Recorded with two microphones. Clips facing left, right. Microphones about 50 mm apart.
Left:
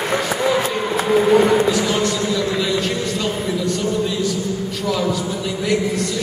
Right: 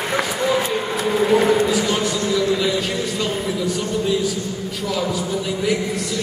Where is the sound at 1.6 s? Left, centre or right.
Centre.